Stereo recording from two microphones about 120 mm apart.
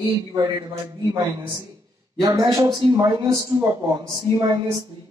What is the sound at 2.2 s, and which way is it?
A man's voice, 35° right (ahead or behind).